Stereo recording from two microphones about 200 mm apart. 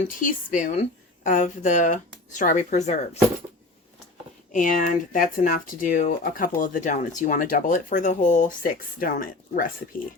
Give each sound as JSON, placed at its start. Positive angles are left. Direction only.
{"t": 0.2, "sound": "a woman's voice", "side_deg": 40}
{"t": 4.5, "sound": "a woman's voice", "side_deg": 40}